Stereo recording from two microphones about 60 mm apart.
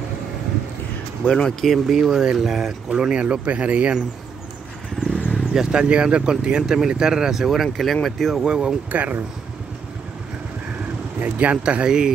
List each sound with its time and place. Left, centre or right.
1.3 s speech: centre
2.0 s speech: centre
5.4 s speech: centre
8.4 s speech: centre
8.9 s speech: right
11.1 s speech: right